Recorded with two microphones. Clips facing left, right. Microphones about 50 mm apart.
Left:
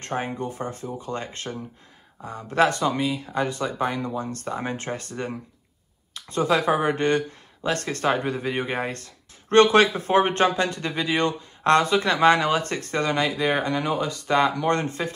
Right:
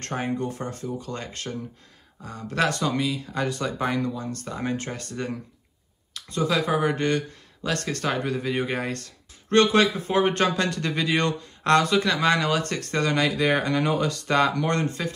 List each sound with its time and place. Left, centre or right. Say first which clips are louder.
0.0 s speech: even; centre
4.1 s speech: left 3 dB; left
6.1 s speech: left 2 dB; left; by 11.3 s centre
11.6 s speech: left 1 dB; left; by 14.7 s centre
15.0 s speech: left 1 dB; left